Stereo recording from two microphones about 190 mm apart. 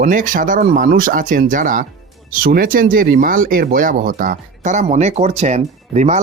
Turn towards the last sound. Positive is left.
turn(degrees=-35)  # may be behind; listen again after turning